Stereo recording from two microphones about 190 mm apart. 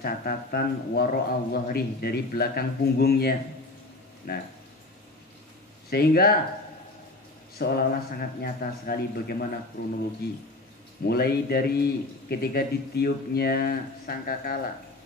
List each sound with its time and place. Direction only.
0.0 s a man's voice: 55° left (ahead or behind)
5.9 s a man's voice: 55° left (ahead or behind)
7.5 s a man's voice: 55° left (ahead or behind)